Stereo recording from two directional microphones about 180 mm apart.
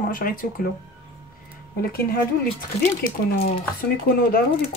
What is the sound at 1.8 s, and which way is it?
Speech, 55° left (ahead or behind).